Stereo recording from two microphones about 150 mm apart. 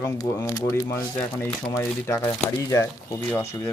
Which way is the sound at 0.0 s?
20° left (ahead or behind).